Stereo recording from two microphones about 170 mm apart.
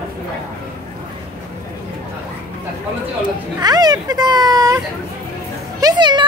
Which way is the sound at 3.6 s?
25° right (ahead or behind).